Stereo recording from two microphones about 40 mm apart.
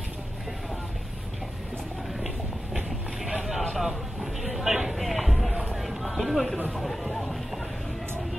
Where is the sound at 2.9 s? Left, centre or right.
Centre.